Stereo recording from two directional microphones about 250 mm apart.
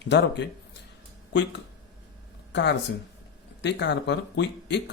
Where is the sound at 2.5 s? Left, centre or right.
Left.